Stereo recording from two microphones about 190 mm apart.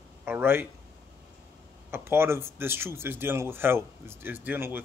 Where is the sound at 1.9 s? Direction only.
10° right (ahead or behind).